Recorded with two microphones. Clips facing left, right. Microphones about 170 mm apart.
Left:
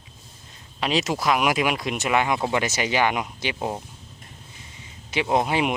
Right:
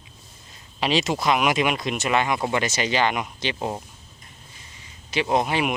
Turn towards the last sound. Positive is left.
turn(degrees=20)  # may be behind; listen again after turning